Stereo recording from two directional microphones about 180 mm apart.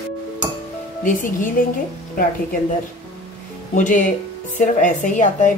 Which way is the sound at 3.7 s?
45° left (ahead or behind).